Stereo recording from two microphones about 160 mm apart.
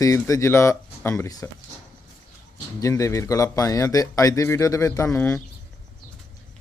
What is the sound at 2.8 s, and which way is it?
A man's voice, 20° left (ahead or behind).